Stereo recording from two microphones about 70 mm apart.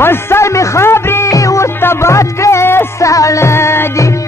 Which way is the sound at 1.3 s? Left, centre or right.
Left.